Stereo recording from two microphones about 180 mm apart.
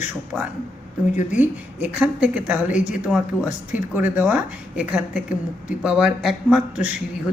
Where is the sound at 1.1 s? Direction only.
45° left (ahead or behind).